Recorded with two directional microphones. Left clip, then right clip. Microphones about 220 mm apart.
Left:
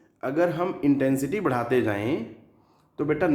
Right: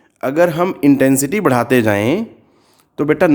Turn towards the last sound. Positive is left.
turn(degrees=-50)  # may be behind; listen again after turning